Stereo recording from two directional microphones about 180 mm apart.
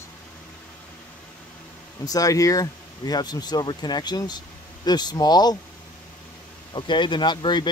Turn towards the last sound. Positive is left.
turn(degrees=25)  # may be behind; listen again after turning